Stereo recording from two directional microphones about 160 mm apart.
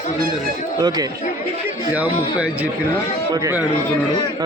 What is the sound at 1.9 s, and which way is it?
Speech, 10° right (ahead or behind).